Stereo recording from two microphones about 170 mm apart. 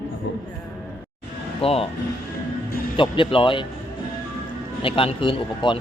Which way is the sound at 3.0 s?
30° left (ahead or behind).